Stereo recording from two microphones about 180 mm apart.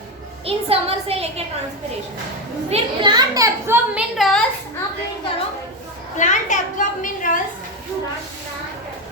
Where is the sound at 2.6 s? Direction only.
30° right (ahead or behind).